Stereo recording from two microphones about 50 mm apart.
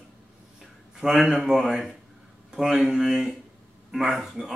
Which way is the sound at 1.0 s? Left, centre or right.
Centre.